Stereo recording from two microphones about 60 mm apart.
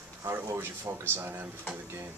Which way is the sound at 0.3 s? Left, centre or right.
Right.